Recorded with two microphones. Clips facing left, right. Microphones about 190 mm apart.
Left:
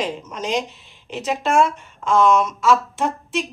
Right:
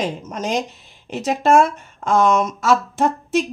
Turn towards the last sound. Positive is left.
turn(degrees=-45)  # may be behind; listen again after turning